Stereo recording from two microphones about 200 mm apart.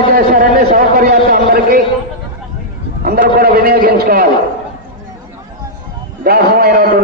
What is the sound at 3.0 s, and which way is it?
A man's voice, 50° right (ahead or behind).